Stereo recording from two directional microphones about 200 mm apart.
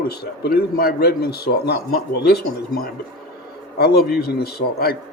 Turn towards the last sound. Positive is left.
turn(degrees=50)  # may be behind; listen again after turning